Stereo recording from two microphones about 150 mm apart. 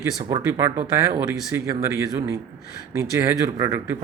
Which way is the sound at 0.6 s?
20° right (ahead or behind).